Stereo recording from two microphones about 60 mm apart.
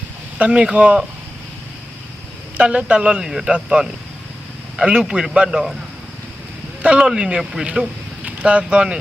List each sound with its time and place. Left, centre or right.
0.3 s speech: centre
2.6 s speech: right
6.8 s speech: centre